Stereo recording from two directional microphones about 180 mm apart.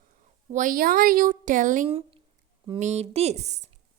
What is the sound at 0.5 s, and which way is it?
A woman's voice, 50° right (ahead or behind).